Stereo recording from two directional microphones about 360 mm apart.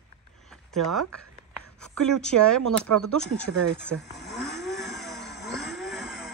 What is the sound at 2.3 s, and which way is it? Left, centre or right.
Speech, right.